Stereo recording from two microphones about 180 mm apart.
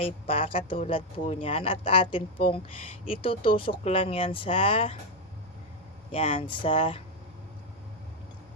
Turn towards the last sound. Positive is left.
turn(degrees=30)  # may be behind; listen again after turning